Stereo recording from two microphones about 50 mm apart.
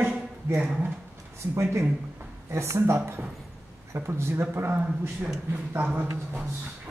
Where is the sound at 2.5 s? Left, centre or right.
Right.